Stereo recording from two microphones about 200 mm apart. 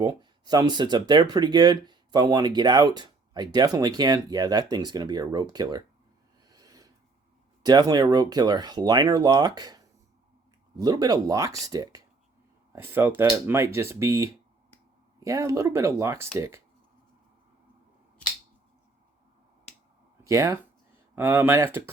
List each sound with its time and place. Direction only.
0.0 s speech: 20° right (ahead or behind)
6.5 s snort: 20° right (ahead or behind)
7.6 s speech: 20° right (ahead or behind)
20.2 s speech: 15° right (ahead or behind)